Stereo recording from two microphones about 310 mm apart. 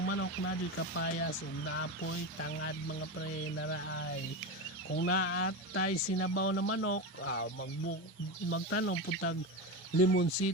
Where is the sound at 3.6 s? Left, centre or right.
Left.